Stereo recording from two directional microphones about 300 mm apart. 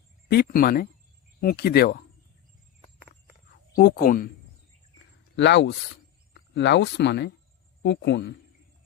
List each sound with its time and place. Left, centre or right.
0.3 s speech: left
3.8 s speech: left
5.4 s speech: left